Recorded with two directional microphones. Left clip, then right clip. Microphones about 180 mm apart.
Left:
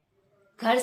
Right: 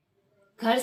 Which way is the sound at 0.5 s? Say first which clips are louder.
Left 1 dB; 20° left (ahead or behind).